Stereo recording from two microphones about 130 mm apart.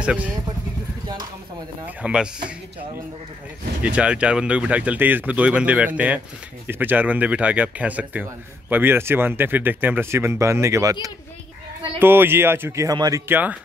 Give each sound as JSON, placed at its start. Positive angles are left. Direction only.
{"t": 0.0, "sound": "speech", "side_deg": -10}
{"t": 2.0, "sound": "speech", "side_deg": -10}
{"t": 3.8, "sound": "speech", "side_deg": -10}
{"t": 12.0, "sound": "speech", "side_deg": -15}
{"t": 13.3, "sound": "speech", "side_deg": -15}